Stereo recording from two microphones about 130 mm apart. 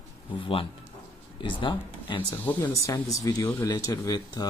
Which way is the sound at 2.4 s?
20° left (ahead or behind).